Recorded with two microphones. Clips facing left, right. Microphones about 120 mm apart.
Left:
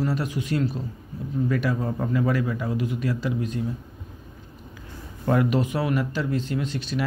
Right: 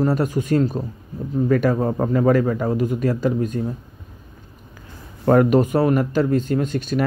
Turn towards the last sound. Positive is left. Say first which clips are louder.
# right 6 dB
turn(degrees=-45)  # may be behind; listen again after turning